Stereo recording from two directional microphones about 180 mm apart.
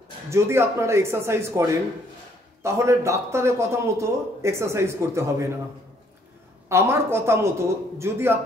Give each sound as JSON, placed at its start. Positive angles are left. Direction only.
{"t": 0.3, "sound": "a man's voice", "side_deg": -15}
{"t": 6.7, "sound": "a man's voice", "side_deg": -15}